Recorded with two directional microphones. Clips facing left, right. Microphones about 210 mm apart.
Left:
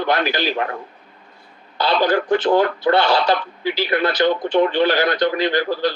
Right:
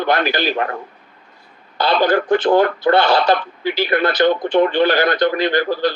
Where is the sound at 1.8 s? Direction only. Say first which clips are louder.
Right 2 dB; 55° right (ahead or behind).